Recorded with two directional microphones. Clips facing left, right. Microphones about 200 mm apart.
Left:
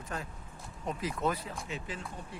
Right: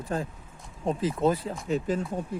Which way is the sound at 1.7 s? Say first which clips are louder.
Right 17 dB; 40° right (ahead or behind).